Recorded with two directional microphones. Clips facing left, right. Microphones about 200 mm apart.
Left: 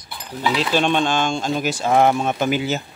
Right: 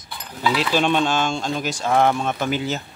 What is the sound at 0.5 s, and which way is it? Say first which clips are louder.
Speech: left 1 dB; 5° right (ahead or behind).